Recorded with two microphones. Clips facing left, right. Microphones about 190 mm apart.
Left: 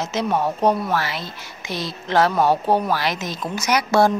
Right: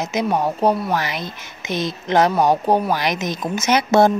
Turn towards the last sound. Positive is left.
turn(degrees=-25)  # may be behind; listen again after turning